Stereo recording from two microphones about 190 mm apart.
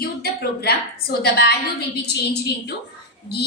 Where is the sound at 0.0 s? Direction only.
55° left (ahead or behind).